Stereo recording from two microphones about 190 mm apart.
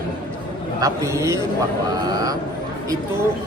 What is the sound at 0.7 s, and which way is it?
Speech, 15° right (ahead or behind).